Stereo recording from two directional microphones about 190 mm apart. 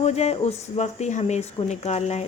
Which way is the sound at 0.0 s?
35° left (ahead or behind).